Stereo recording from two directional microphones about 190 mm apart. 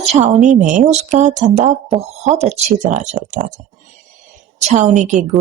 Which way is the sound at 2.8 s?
35° right (ahead or behind).